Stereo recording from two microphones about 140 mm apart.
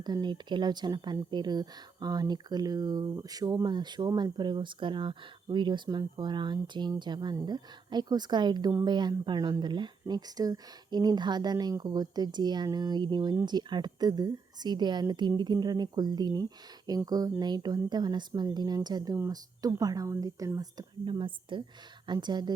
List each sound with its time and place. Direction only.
0.0 s speech: 30° right (ahead or behind)